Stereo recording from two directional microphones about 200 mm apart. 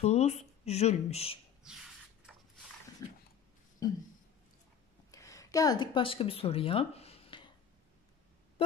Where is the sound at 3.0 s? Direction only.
15° left (ahead or behind).